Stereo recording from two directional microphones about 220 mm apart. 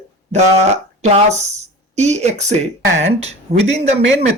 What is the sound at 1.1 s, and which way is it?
Speech, 30° right (ahead or behind).